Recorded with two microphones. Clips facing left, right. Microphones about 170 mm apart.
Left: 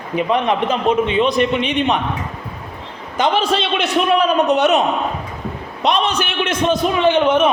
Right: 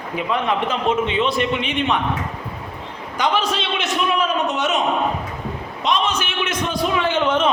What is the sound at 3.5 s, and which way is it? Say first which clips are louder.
A man's voice: left 6 dB; 65° left (ahead or behind).